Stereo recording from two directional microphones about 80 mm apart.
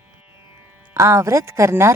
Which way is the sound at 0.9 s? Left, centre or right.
Right.